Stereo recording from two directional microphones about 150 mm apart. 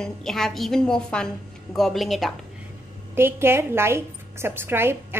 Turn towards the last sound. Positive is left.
turn(degrees=-15)  # may be behind; listen again after turning